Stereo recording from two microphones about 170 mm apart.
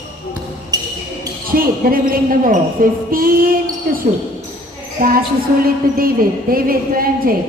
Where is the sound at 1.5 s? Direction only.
55° right (ahead or behind).